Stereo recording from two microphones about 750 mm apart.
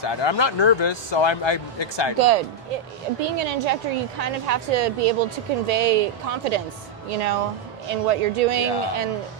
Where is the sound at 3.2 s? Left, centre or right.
Right.